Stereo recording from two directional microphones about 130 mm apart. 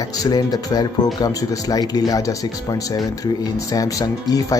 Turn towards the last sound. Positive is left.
turn(degrees=25)  # may be behind; listen again after turning